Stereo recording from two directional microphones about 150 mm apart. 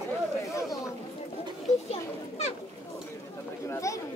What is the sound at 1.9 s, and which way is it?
Children playing, 45° left (ahead or behind).